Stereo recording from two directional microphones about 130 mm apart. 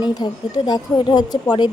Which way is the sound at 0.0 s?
30° left (ahead or behind).